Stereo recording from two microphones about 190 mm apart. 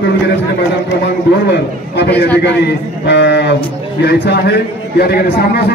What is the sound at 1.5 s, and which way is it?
A man's voice, 60° left (ahead or behind).